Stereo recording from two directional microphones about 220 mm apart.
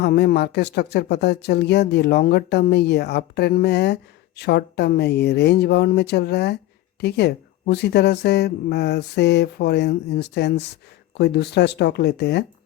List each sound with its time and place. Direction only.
0.0 s speech: 45° left (ahead or behind)